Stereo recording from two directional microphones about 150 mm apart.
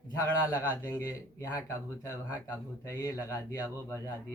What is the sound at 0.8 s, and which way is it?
Speech, 15° left (ahead or behind).